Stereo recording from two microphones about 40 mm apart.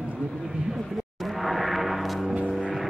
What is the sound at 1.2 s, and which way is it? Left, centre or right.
Gong, centre.